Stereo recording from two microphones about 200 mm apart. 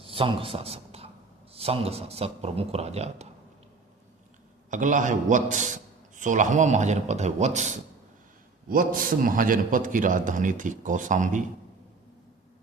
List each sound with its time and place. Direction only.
0.0 s a sound: 25° right (ahead or behind)
1.5 s a man's voice: 30° right (ahead or behind)
4.7 s a man's voice: 40° right (ahead or behind)